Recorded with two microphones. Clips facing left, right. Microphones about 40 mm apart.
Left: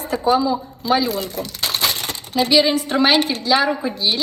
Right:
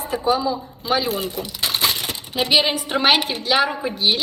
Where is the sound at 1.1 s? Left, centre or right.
Right.